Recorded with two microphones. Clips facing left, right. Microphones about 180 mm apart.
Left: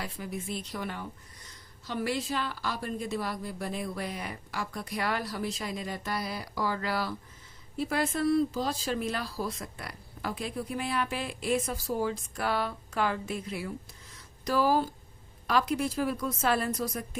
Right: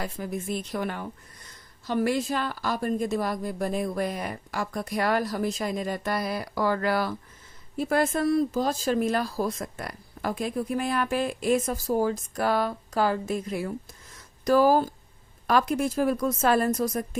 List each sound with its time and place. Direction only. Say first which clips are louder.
0.0 s speech: right 5 dB; 45° right (ahead or behind)